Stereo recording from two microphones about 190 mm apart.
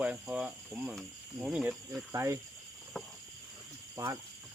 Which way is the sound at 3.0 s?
Centre (ahead or behind).